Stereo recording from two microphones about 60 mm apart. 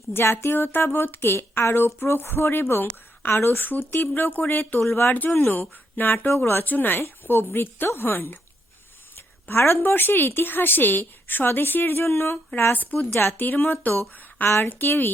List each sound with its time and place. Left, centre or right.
0.1 s a woman's voice: left
9.1 s a sound: left
9.8 s a woman's voice: left